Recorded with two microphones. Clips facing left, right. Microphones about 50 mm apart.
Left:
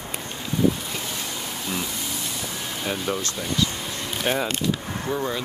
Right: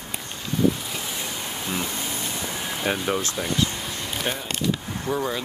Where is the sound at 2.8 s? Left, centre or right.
Centre.